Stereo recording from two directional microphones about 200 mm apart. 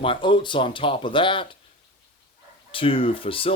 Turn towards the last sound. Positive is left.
turn(degrees=25)  # may be behind; listen again after turning